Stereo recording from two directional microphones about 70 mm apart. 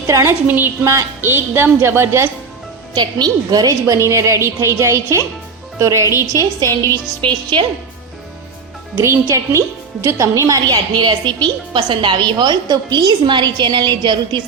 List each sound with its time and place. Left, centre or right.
0.1 s a woman's voice: right
0.4 s a woman's voice: right
2.9 s a woman's voice: right
6.6 s a woman's voice: right
9.0 s a woman's voice: right